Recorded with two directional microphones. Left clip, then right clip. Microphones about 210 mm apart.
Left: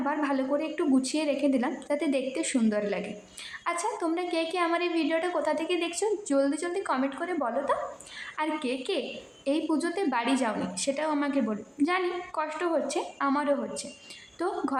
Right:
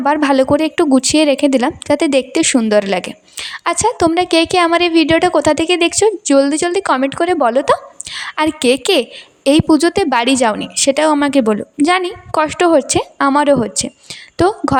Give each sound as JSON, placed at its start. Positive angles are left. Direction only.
{"t": 0.0, "sound": "a woman's voice", "side_deg": -50}